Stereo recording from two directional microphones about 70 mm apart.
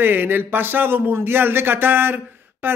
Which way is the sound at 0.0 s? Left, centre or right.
Right.